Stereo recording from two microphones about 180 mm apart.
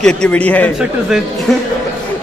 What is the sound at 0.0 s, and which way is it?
A man's voice, 5° left (ahead or behind).